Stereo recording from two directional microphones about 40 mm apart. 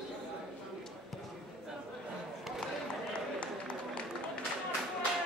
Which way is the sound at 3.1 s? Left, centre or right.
Left.